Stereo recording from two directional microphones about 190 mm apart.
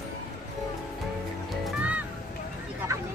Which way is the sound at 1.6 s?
5° right (ahead or behind).